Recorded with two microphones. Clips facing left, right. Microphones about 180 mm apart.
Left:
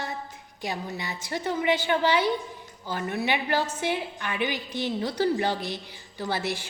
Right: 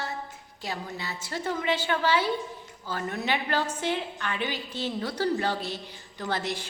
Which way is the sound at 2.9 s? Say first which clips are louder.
Left 2 dB; 15° left (ahead or behind).